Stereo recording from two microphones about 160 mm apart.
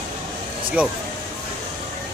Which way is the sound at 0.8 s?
10° right (ahead or behind).